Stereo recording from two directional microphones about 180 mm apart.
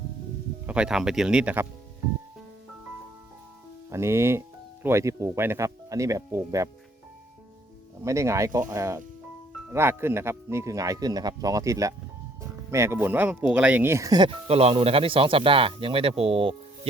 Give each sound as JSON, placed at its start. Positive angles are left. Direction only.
{"t": 0.7, "sound": "speech", "side_deg": -5}
{"t": 3.8, "sound": "speech", "side_deg": -15}
{"t": 8.0, "sound": "speech", "side_deg": -15}